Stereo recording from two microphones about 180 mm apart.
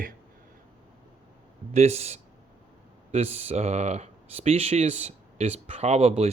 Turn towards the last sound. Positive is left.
turn(degrees=-35)  # may be behind; listen again after turning